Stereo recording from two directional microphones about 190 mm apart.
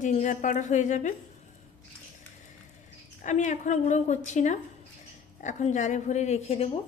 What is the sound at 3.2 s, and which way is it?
Speech, 40° left (ahead or behind).